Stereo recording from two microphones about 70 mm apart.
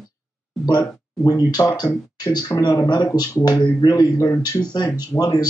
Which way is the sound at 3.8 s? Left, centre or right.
Left.